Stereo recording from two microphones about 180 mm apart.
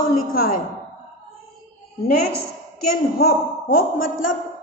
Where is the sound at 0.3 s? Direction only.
55° left (ahead or behind).